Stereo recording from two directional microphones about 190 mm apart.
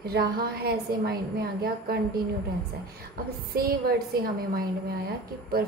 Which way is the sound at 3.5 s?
55° right (ahead or behind).